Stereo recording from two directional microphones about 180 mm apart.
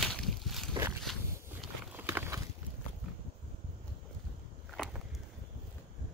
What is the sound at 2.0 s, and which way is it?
Clip-clop, 15° right (ahead or behind).